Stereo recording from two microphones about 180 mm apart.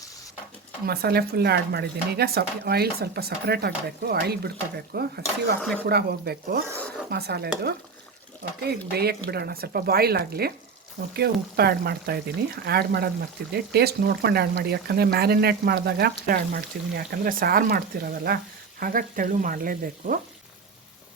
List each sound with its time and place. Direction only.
0.9 s speech: 60° right (ahead or behind)